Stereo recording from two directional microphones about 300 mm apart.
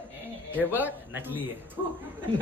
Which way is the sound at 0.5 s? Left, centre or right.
Centre.